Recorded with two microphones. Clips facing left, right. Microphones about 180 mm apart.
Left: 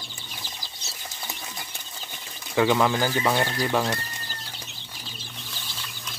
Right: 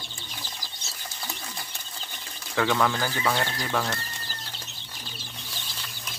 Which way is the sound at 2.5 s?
15° left (ahead or behind).